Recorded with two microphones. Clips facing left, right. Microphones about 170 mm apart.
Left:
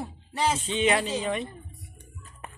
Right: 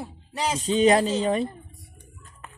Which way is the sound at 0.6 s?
40° right (ahead or behind).